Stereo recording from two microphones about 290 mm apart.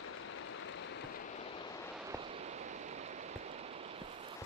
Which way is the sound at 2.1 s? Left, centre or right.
Right.